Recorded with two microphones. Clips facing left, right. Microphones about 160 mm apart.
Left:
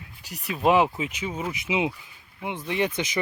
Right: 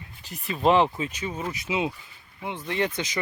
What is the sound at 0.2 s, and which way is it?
Speech, 75° left (ahead or behind).